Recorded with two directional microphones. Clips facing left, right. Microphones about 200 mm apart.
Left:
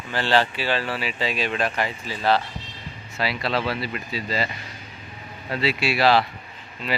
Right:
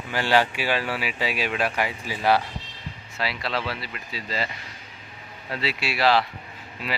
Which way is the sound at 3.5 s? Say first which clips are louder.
Left 4 dB; 35° left (ahead or behind).